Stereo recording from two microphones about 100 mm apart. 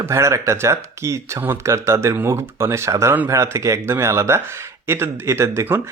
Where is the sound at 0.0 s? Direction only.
25° right (ahead or behind).